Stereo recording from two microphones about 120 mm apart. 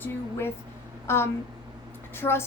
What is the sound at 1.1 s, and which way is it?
A woman's voice, 20° left (ahead or behind).